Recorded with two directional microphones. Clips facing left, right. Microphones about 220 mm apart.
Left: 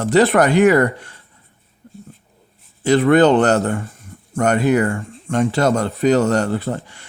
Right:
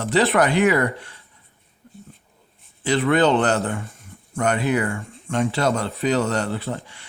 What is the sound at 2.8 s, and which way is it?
Speech, 45° left (ahead or behind).